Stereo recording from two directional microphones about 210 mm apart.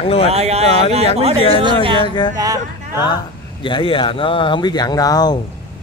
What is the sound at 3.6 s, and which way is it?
Speech, 25° left (ahead or behind).